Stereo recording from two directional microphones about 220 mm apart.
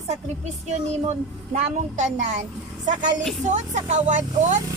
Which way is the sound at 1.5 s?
35° right (ahead or behind).